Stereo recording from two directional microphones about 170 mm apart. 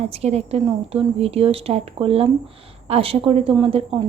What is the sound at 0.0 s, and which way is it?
A woman's voice, 35° right (ahead or behind).